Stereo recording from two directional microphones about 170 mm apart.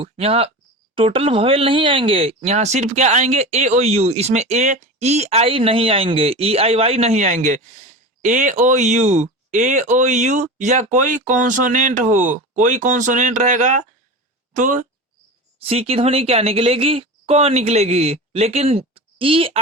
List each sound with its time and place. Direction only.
0.0 s speech: 35° right (ahead or behind)
15.5 s speech: 35° right (ahead or behind)